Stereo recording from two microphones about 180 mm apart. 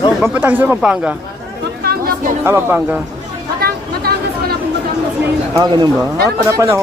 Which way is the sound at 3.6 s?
60° right (ahead or behind).